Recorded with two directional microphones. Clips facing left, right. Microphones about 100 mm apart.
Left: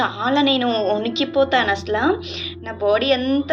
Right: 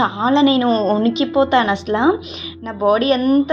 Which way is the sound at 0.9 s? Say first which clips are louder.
Right 4 dB; 45° right (ahead or behind).